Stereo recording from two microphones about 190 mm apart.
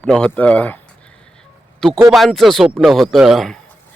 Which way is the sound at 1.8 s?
Centre (ahead or behind).